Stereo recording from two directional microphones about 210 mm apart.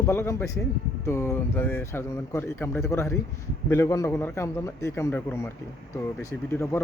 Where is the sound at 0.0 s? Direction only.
10° left (ahead or behind).